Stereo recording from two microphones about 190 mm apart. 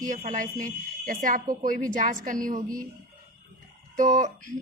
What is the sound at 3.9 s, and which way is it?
Speech, 40° right (ahead or behind).